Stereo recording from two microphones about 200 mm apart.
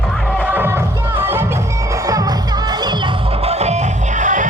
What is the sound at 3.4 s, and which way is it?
Music, 30° right (ahead or behind).